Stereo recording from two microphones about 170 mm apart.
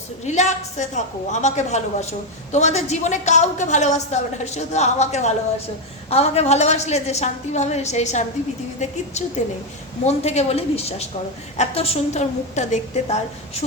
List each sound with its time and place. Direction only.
0.3 s a woman's voice: 45° left (ahead or behind)
10.0 s a woman's voice: 40° left (ahead or behind)